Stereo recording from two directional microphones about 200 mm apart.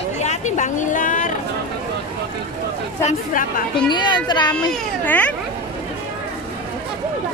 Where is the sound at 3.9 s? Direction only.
20° left (ahead or behind).